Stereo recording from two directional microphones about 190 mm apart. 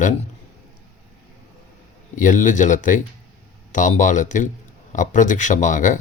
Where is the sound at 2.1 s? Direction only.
40° left (ahead or behind).